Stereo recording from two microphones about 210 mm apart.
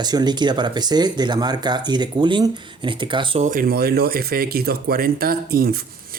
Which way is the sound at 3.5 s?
45° right (ahead or behind).